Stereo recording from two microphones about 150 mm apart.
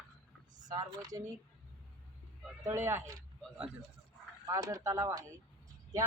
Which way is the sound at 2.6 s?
20° right (ahead or behind).